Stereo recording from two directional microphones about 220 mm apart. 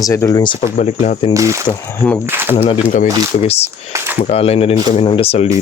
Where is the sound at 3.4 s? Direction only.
30° left (ahead or behind).